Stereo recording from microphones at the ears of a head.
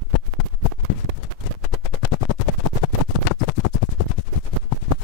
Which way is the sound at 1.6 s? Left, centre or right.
Left.